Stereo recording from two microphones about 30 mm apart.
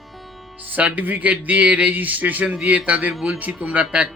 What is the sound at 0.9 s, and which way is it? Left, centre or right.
Speech, right.